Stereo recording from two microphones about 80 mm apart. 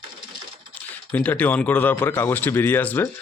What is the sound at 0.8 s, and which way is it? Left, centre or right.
Speech, centre.